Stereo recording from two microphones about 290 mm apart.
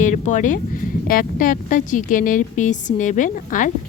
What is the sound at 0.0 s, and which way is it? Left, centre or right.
A woman's voice, left.